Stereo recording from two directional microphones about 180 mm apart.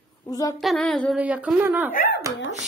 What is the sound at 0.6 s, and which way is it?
Child singing, centre (ahead or behind).